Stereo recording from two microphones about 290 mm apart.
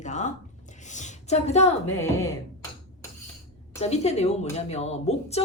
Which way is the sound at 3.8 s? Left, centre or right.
Left.